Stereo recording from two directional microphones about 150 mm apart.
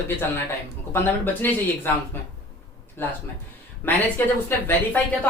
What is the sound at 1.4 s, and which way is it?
Speech, 10° left (ahead or behind).